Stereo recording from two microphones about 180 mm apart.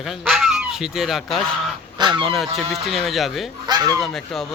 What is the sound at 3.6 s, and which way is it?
Speech, 20° right (ahead or behind).